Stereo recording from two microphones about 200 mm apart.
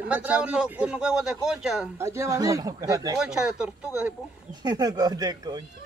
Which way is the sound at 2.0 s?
15° right (ahead or behind).